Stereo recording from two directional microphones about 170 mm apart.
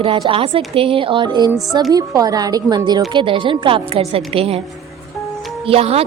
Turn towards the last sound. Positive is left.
turn(degrees=-35)  # may be behind; listen again after turning